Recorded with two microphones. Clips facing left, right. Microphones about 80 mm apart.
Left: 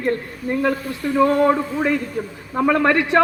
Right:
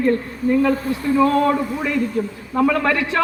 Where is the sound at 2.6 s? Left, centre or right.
Left.